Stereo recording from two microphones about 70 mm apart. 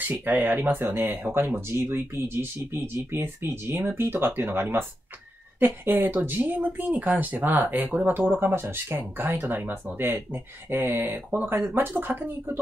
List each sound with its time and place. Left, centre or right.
0.1 s speech: right